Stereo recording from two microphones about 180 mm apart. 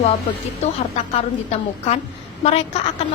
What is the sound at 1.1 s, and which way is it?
A woman's voice, 35° left (ahead or behind).